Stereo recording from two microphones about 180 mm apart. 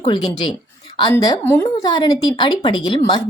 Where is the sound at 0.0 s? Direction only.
25° left (ahead or behind).